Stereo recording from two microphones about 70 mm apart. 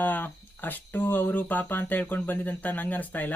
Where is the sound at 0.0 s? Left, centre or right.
Left.